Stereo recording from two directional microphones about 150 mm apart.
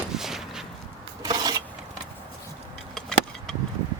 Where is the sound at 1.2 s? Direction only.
25° right (ahead or behind).